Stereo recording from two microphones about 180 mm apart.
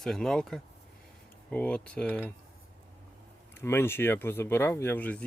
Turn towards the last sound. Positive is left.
turn(degrees=10)  # may be behind; listen again after turning